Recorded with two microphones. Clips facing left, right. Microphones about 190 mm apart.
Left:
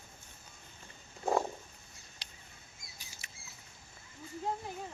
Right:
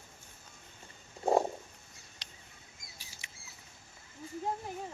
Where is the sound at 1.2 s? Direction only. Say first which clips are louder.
Right 4 dB; 25° right (ahead or behind).